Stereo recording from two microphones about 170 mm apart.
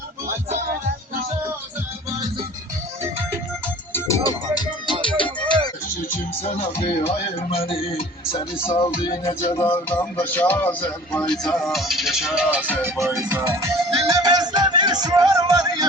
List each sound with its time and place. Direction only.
3.9 s music: 15° left (ahead or behind)
6.1 s speech: 40° left (ahead or behind)
9.0 s music: 25° left (ahead or behind)
10.0 s speech: 10° left (ahead or behind); by 13.2 s 5° right (ahead or behind)
13.2 s music: 15° right (ahead or behind)